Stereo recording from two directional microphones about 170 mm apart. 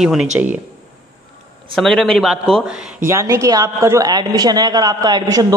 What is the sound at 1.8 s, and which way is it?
Speech, 5° left (ahead or behind).